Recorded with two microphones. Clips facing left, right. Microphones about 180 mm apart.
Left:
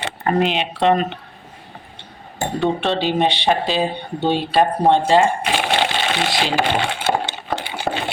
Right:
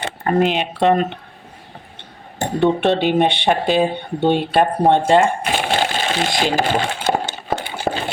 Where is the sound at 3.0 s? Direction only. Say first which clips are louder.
Right 2 dB; 55° right (ahead or behind).